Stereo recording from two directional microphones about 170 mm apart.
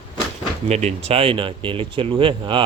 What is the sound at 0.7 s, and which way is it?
Speech, 40° right (ahead or behind).